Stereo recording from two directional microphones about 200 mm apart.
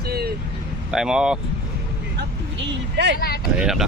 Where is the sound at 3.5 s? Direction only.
5° right (ahead or behind).